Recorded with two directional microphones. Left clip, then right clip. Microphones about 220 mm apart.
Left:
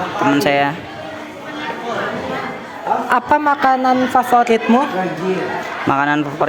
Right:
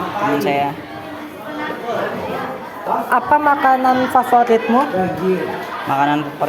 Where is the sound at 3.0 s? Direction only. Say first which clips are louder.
Right 1 dB; 45° left (ahead or behind).